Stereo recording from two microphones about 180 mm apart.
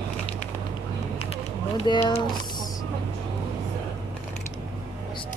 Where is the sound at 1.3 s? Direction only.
30° left (ahead or behind).